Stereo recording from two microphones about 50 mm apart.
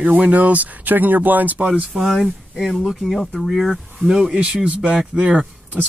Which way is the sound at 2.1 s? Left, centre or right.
Centre.